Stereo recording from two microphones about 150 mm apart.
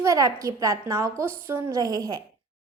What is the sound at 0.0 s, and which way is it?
A woman's voice, 20° right (ahead or behind).